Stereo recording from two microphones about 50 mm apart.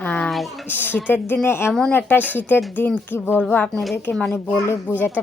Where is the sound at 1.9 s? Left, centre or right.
Left.